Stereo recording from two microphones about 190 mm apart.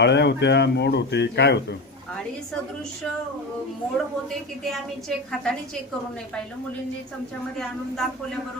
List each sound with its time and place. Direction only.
0.0 s speech: 65° left (ahead or behind)
4.6 s a woman's voice: centre (ahead or behind)
7.6 s a woman's voice: 5° left (ahead or behind)